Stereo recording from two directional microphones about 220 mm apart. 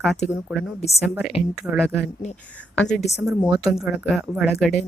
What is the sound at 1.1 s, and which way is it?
Speech, 5° right (ahead or behind).